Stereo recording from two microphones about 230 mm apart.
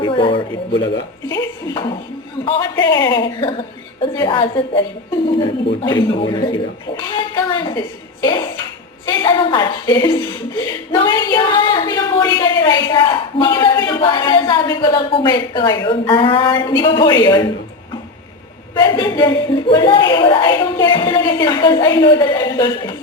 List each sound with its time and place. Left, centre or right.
0.0 s a woman's voice: left
2.4 s a woman's voice: left
18.7 s a woman's voice: centre